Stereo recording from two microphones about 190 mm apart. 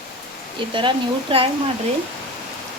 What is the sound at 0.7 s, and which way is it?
Speech, 25° right (ahead or behind).